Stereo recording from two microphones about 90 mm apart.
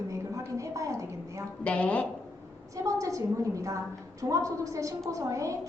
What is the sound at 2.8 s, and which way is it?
A woman's voice, 35° right (ahead or behind).